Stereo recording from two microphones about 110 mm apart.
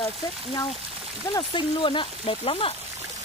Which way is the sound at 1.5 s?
45° left (ahead or behind).